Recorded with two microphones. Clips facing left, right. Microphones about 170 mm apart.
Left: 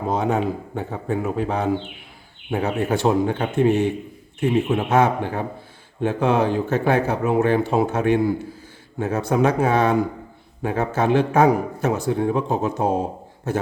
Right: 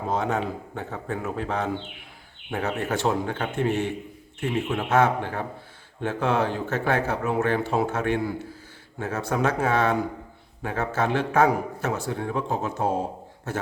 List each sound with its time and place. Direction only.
0.1 s a man's voice: 15° left (ahead or behind)